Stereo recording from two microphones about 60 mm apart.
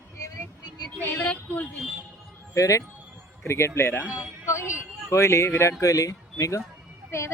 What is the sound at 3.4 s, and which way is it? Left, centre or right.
Speech, left.